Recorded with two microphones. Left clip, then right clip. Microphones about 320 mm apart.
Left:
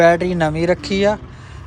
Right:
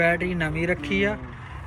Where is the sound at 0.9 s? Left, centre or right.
Left.